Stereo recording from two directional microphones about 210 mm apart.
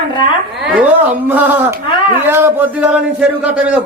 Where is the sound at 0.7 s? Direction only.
5° right (ahead or behind).